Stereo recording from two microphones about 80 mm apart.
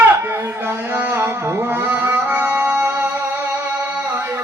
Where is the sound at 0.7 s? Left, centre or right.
Right.